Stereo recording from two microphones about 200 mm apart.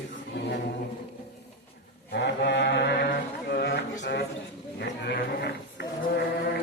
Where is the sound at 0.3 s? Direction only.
60° left (ahead or behind).